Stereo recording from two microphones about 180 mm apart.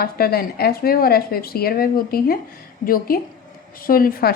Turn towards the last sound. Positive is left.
turn(degrees=55)  # may be behind; listen again after turning